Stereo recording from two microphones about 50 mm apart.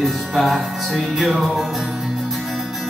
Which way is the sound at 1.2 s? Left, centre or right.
Right.